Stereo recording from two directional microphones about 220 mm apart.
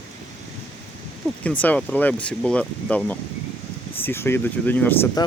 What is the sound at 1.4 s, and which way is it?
Speech, 5° left (ahead or behind).